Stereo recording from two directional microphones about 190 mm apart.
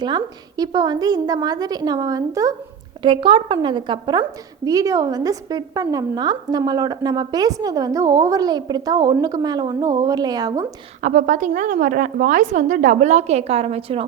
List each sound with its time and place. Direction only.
0.0 s a woman's voice: 20° right (ahead or behind)
11.0 s a woman's voice: 40° right (ahead or behind)